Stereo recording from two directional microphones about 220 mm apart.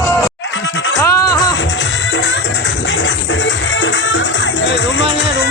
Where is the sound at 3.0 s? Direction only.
60° left (ahead or behind).